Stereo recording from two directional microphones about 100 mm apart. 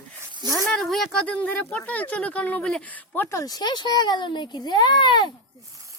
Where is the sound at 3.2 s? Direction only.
30° left (ahead or behind); by 5.3 s 50° left (ahead or behind).